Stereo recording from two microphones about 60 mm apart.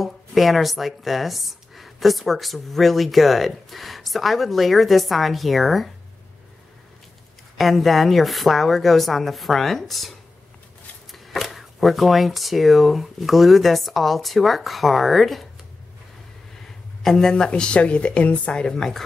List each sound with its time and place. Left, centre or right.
0.0 s a woman's voice: centre
7.5 s a woman's voice: centre
17.0 s speech: centre